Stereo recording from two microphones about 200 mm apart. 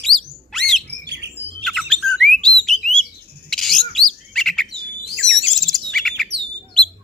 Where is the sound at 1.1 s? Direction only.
60° right (ahead or behind).